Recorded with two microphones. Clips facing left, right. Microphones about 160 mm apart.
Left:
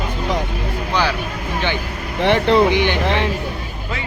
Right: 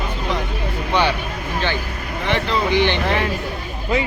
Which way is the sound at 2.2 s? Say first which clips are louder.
Left 7 dB; 60° left (ahead or behind).